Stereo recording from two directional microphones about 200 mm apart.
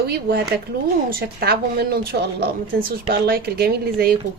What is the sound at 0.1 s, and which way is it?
Speech, 50° right (ahead or behind).